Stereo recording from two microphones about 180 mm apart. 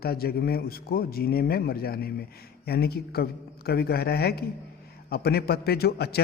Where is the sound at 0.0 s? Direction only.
60° left (ahead or behind).